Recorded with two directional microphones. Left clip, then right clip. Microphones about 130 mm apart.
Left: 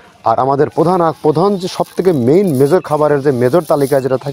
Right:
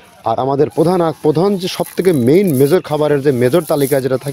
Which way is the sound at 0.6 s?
20° right (ahead or behind).